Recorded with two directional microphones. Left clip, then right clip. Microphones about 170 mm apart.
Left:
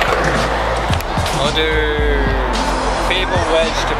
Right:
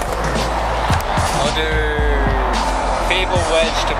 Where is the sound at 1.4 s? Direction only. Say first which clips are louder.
Left 2 dB; 5° right (ahead or behind).